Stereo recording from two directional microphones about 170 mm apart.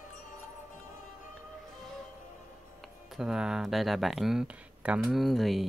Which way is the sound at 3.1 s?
5° right (ahead or behind).